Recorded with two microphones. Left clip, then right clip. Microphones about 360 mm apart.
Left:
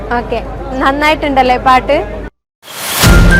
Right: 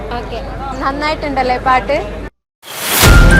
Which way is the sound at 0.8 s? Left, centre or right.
Left.